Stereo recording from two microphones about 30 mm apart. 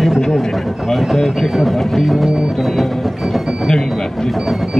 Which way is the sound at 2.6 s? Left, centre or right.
Centre.